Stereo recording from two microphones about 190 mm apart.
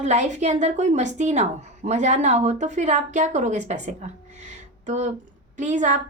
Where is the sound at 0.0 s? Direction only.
35° right (ahead or behind).